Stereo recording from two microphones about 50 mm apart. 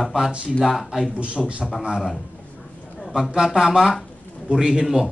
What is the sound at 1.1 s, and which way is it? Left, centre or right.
Speech, right.